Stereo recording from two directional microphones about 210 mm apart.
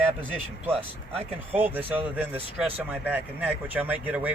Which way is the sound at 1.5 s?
10° right (ahead or behind).